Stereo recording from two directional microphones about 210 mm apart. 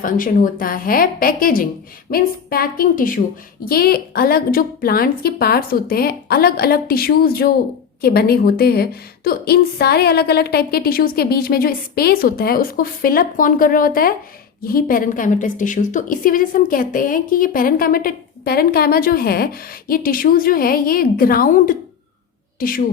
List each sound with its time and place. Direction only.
0.0 s a woman's voice: 40° left (ahead or behind)